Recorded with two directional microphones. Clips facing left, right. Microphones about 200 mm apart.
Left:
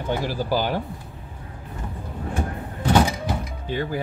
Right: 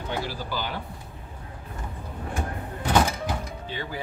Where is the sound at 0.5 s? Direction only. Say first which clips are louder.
Left 9 dB; 45° left (ahead or behind).